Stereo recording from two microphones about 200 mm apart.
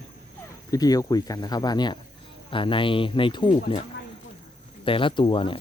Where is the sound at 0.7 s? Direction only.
20° left (ahead or behind).